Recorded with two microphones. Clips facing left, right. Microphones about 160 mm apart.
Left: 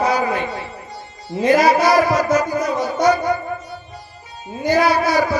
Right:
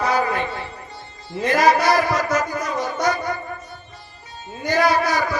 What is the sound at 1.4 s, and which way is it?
Music, 45° right (ahead or behind).